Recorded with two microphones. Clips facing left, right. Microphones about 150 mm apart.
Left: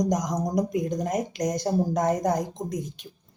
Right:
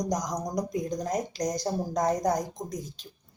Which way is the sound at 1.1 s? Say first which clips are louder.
Left 3 dB; 10° left (ahead or behind).